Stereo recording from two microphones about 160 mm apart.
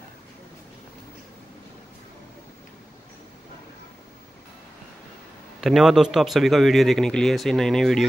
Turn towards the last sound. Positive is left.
turn(degrees=0)  # may be behind; listen again after turning